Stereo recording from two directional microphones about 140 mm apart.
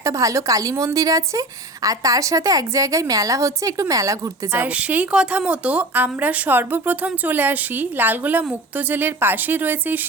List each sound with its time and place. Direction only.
0.0 s a woman's voice: 25° right (ahead or behind)
4.6 s a woman's voice: 10° right (ahead or behind)